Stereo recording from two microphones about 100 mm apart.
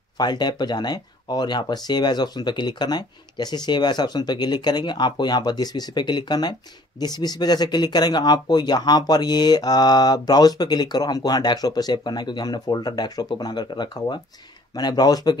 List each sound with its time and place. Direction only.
0.2 s speech: 45° left (ahead or behind)